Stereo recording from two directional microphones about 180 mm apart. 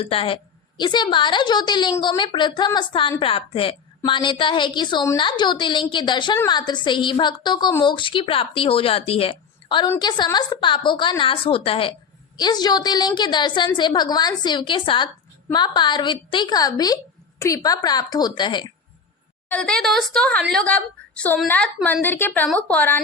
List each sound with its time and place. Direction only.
0.0 s a woman's voice: 30° left (ahead or behind)
19.5 s a woman's voice: 5° left (ahead or behind)